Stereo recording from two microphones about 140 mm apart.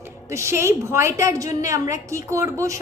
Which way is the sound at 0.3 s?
20° right (ahead or behind).